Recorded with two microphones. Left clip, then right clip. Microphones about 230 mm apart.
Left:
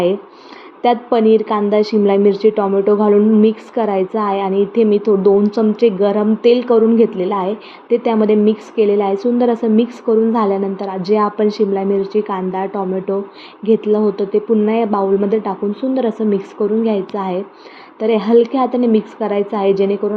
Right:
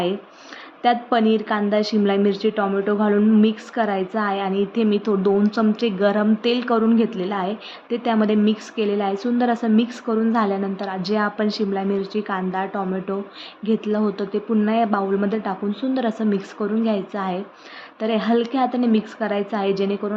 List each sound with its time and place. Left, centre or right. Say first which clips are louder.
0.8 s a woman's voice: left 5 dB; centre